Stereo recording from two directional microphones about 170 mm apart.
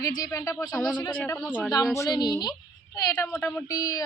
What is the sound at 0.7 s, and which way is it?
Speech, 10° left (ahead or behind).